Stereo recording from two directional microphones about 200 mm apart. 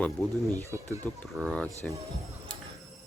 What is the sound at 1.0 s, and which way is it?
Speech, 5° left (ahead or behind).